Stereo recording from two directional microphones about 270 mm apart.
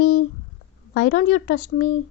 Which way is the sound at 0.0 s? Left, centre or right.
Left.